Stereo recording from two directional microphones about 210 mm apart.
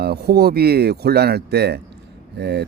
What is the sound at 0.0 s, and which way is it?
Speech, 50° right (ahead or behind).